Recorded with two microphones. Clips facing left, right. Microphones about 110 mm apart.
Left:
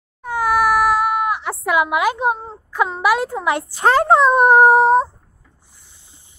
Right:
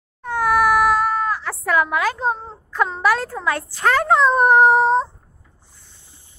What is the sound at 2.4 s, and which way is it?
Speech, 5° left (ahead or behind).